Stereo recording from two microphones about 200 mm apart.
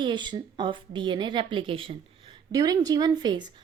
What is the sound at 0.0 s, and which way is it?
Speech, 25° right (ahead or behind).